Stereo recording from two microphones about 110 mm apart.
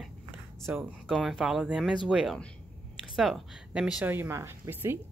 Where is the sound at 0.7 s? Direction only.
15° right (ahead or behind).